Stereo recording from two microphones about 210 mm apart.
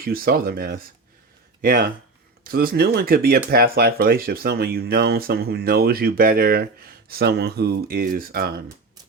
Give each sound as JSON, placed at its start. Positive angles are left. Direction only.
{"t": 0.0, "sound": "speech", "side_deg": -45}